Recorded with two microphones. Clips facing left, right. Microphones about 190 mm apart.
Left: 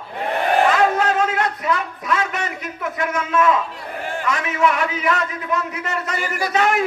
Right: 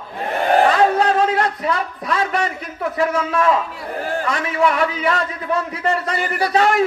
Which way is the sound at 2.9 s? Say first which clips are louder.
Right 2 dB; 35° right (ahead or behind).